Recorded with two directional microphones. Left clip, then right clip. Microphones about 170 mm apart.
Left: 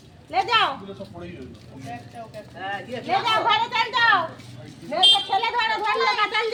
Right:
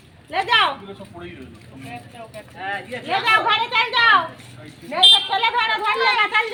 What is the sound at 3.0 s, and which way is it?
Speech, 25° right (ahead or behind).